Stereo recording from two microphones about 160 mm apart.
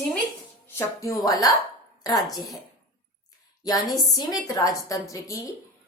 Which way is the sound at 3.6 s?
25° left (ahead or behind).